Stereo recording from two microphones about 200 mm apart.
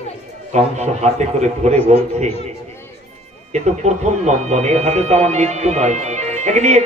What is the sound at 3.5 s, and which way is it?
Speech, 35° right (ahead or behind).